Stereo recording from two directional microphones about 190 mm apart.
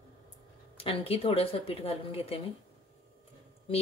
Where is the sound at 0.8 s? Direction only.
30° left (ahead or behind).